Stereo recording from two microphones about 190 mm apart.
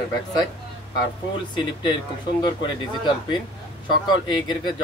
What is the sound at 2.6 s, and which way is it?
Speech, 25° left (ahead or behind).